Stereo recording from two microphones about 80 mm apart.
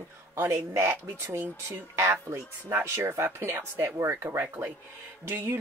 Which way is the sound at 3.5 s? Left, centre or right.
Right.